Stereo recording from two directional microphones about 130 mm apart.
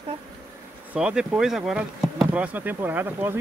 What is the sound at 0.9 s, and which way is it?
Bee, 10° right (ahead or behind).